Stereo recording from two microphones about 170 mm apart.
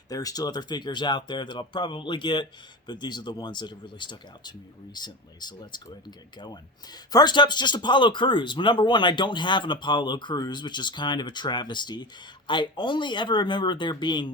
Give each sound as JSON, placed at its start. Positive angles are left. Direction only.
{"t": 0.1, "sound": "speech", "side_deg": 20}